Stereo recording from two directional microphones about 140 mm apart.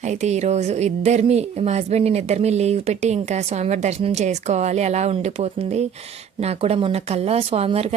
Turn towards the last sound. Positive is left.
turn(degrees=-45)  # may be behind; listen again after turning